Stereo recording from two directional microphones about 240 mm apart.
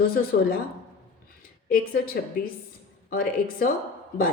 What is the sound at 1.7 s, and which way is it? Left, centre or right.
A woman's voice, left.